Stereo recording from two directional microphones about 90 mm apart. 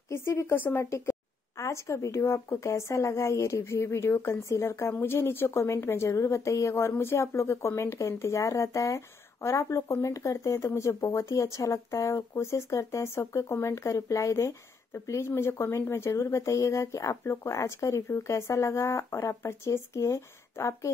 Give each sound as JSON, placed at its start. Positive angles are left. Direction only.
{"t": 0.1, "sound": "a woman's voice", "side_deg": 30}